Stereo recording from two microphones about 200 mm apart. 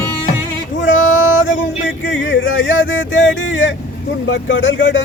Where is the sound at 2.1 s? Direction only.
65° left (ahead or behind).